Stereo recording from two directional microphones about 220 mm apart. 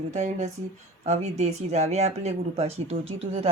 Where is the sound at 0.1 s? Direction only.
30° right (ahead or behind).